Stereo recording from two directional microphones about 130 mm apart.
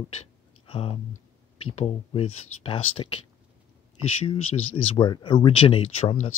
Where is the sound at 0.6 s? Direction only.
45° left (ahead or behind).